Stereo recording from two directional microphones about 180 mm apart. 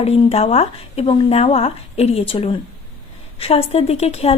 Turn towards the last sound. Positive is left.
turn(degrees=35)  # may be behind; listen again after turning